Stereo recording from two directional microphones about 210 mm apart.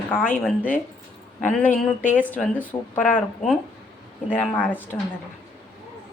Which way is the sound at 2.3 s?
5° left (ahead or behind).